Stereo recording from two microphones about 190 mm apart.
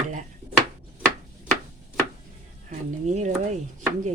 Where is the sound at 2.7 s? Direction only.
40° right (ahead or behind).